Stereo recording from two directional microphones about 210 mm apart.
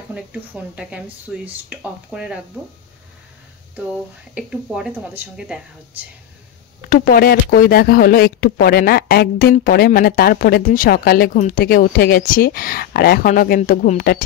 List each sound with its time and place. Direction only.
0.1 s speech: 5° right (ahead or behind)
4.4 s speech: 5° right (ahead or behind)
6.9 s speech: 45° left (ahead or behind)